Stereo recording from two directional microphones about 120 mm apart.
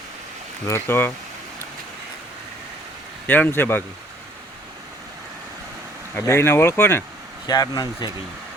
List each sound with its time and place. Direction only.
0.7 s speech: 20° left (ahead or behind)
3.2 s speech: 15° left (ahead or behind)
6.1 s speech: 20° left (ahead or behind)
7.4 s speech: 35° left (ahead or behind)